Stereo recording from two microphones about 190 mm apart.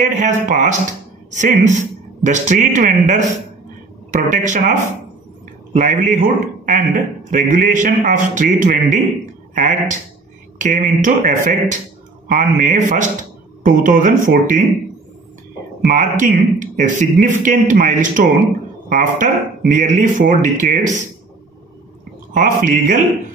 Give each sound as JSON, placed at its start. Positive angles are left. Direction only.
{"t": 0.0, "sound": "a man's voice", "side_deg": -40}
{"t": 5.7, "sound": "a man's voice", "side_deg": -45}
{"t": 15.9, "sound": "a man's voice", "side_deg": -45}
{"t": 22.3, "sound": "a man's voice", "side_deg": -45}